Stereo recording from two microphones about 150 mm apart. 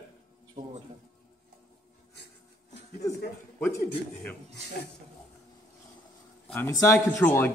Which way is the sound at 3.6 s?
10° left (ahead or behind).